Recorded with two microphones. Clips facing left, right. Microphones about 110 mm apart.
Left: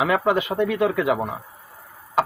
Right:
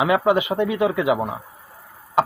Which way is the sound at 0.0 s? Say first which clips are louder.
Right 2 dB; 15° right (ahead or behind).